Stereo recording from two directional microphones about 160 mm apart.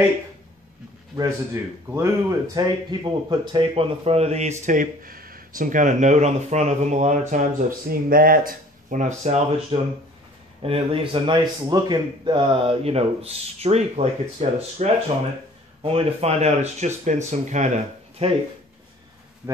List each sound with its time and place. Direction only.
1.1 s speech: 20° right (ahead or behind); by 7.4 s 50° right (ahead or behind)
7.9 s speech: 65° right (ahead or behind); by 9.8 s 45° right (ahead or behind)
10.6 s a man's voice: 35° right (ahead or behind)
19.4 s speech: 10° right (ahead or behind)